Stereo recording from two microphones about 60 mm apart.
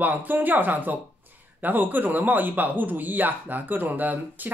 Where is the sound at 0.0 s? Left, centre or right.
Right.